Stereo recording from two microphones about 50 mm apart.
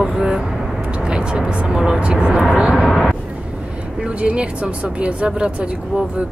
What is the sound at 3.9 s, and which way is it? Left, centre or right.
Speech, right.